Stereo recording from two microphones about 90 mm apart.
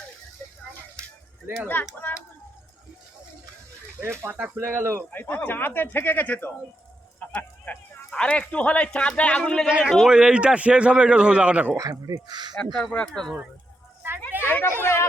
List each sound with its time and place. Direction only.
1.6 s speech: 20° left (ahead or behind)
4.0 s speech: 25° right (ahead or behind)
5.1 s speech: 20° left (ahead or behind)
9.6 s a man's voice: 10° right (ahead or behind)
11.8 s speech: 40° right (ahead or behind)
12.9 s speech: 10° left (ahead or behind)
14.4 s a sound: 25° left (ahead or behind)
14.8 s chatter: 30° left (ahead or behind)